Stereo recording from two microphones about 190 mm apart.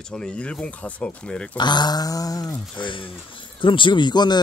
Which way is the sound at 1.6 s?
20° left (ahead or behind).